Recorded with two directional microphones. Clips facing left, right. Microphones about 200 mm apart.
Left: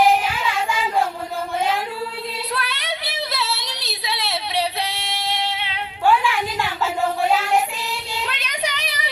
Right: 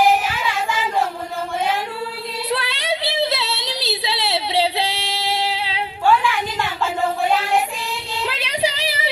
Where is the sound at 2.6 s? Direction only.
30° right (ahead or behind).